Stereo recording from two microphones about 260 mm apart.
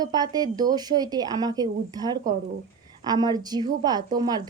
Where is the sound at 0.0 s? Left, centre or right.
Centre.